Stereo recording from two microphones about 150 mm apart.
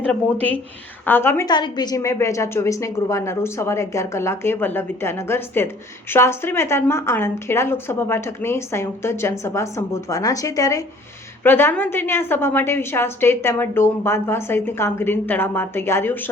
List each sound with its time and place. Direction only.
1.0 s a woman's voice: 15° left (ahead or behind)
1.5 s a woman's voice: 30° left (ahead or behind); by 16.3 s 15° left (ahead or behind)